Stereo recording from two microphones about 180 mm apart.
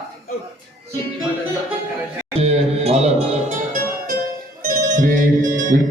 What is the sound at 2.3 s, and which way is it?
Music, 35° right (ahead or behind).